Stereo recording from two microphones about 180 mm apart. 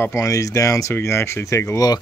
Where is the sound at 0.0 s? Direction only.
15° left (ahead or behind).